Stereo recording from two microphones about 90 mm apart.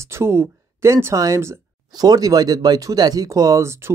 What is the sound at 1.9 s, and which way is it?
Speech, 45° right (ahead or behind).